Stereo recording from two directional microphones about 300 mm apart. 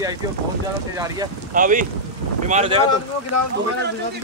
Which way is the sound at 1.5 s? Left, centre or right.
Right.